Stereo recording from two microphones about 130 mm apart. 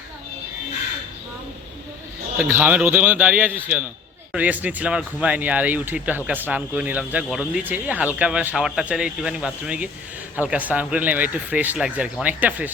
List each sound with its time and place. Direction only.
2.4 s speech: 15° right (ahead or behind)